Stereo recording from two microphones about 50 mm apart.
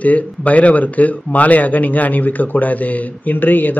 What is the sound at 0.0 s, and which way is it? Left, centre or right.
A man's voice, left.